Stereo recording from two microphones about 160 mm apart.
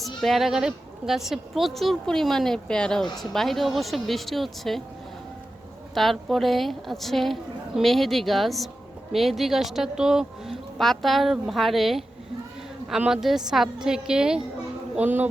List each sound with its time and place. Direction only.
0.0 s speech: centre (ahead or behind)
5.9 s a man's voice: centre (ahead or behind)